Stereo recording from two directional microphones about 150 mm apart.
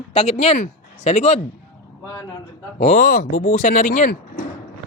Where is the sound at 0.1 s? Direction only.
40° left (ahead or behind).